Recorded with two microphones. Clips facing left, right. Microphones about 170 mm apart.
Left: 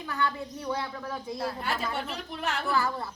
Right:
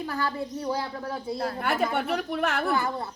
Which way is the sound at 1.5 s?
60° right (ahead or behind).